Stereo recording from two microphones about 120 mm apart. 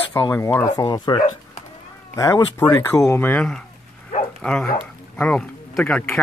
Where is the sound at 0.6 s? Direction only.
35° left (ahead or behind); by 3.4 s 15° left (ahead or behind).